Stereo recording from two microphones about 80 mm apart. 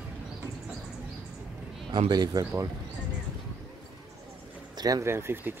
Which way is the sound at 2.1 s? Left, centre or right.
Right.